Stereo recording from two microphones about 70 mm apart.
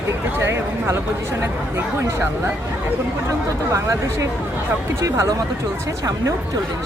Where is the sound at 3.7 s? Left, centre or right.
Right.